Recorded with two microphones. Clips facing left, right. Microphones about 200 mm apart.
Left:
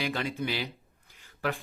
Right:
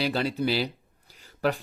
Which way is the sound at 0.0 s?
35° right (ahead or behind).